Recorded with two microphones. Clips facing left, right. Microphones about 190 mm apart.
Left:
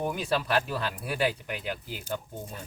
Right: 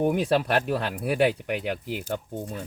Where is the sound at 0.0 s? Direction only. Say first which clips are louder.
Right 7 dB; 60° right (ahead or behind).